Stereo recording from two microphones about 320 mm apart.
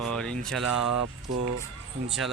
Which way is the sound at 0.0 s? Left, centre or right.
Centre.